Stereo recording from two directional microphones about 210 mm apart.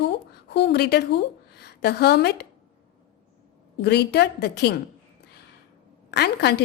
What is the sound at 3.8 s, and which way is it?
Speech, 50° left (ahead or behind).